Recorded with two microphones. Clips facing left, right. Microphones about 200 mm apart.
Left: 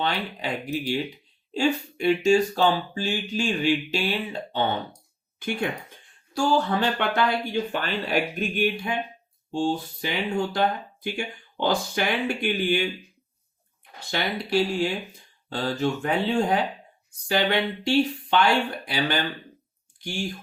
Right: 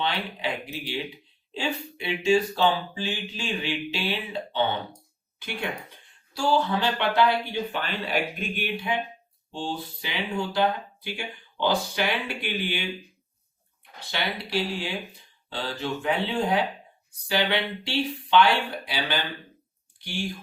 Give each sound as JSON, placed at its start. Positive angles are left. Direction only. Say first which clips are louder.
{"t": 0.0, "sound": "speech", "louder": "left 1 dB", "side_deg": 45}
{"t": 6.3, "sound": "speech", "louder": "left 1 dB", "side_deg": 45}
{"t": 14.1, "sound": "speech", "louder": "left 4 dB", "side_deg": 45}